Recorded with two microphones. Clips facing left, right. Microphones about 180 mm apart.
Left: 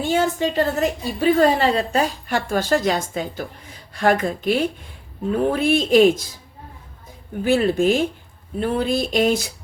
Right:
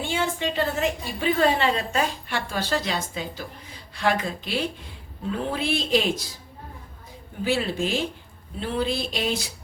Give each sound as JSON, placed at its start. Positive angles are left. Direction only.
{"t": 0.0, "sound": "a woman's voice", "side_deg": 40}
{"t": 2.5, "sound": "speech", "side_deg": 50}
{"t": 7.4, "sound": "speech", "side_deg": 50}